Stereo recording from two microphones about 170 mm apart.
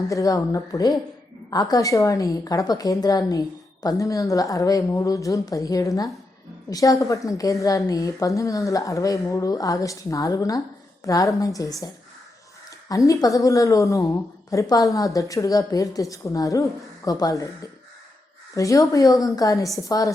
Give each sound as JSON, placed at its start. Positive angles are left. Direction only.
{"t": 0.1, "sound": "a woman's voice", "side_deg": 20}
{"t": 12.9, "sound": "a woman's voice", "side_deg": 20}